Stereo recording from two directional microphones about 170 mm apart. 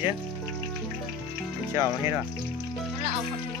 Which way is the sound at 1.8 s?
15° right (ahead or behind).